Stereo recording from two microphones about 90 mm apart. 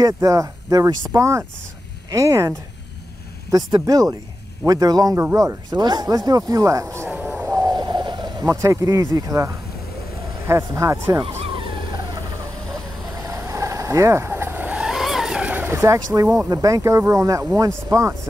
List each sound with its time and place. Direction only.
0.0 s speech: 40° right (ahead or behind)
3.8 s a man's voice: 45° right (ahead or behind)
5.1 s speech: 35° right (ahead or behind)
7.4 s a sound: 40° right (ahead or behind)
7.7 s a sound: 55° right (ahead or behind)
8.5 s speech: 35° right (ahead or behind)
11.1 s vehicle: 65° right (ahead or behind)
13.2 s vehicle: 35° right (ahead or behind)
14.7 s vehicle: 5° right (ahead or behind)
15.5 s speech: 25° right (ahead or behind)